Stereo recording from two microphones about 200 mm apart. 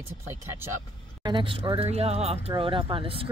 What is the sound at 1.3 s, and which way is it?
Speech, 25° right (ahead or behind).